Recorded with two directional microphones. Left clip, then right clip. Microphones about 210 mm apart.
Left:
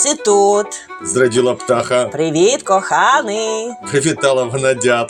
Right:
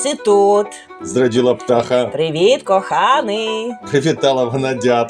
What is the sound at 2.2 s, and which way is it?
Speech, 30° left (ahead or behind).